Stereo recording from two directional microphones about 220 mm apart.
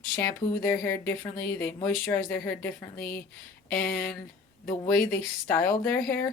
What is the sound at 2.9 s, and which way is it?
Speech, 40° left (ahead or behind).